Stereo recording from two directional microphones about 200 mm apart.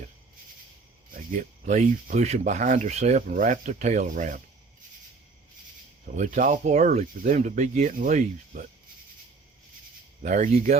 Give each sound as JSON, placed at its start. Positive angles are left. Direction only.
{"t": 1.1, "sound": "speech", "side_deg": -40}
{"t": 6.1, "sound": "speech", "side_deg": -40}
{"t": 10.2, "sound": "speech", "side_deg": -40}